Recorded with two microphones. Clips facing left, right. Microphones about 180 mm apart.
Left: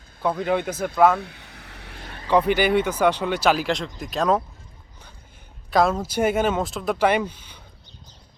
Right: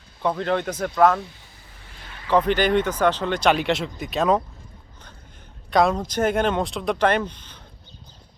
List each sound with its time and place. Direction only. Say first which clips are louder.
0.2 s speech: even; 5° left (ahead or behind)
1.2 s a sound: left 2 dB; 70° left (ahead or behind)
2.2 s speech: even; 10° left (ahead or behind)
5.7 s speech: even; centre (ahead or behind)